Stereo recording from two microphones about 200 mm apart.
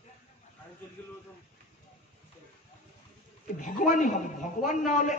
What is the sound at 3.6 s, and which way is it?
A woman's voice, 40° left (ahead or behind).